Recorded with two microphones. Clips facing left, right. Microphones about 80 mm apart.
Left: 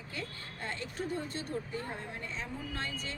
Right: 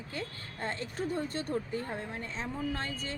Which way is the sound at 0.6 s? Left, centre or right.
Right.